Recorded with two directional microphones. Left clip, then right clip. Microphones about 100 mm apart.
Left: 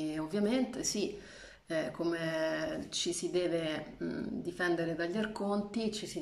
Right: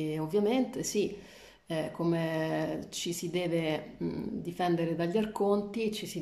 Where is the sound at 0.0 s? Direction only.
20° right (ahead or behind).